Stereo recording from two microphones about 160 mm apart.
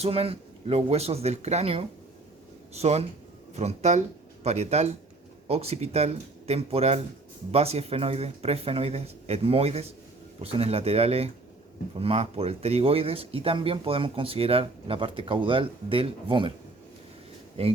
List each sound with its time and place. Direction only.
0.0 s speech: 40° right (ahead or behind)